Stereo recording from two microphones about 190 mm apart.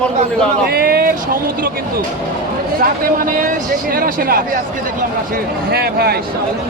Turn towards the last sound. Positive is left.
turn(degrees=-55)  # may be behind; listen again after turning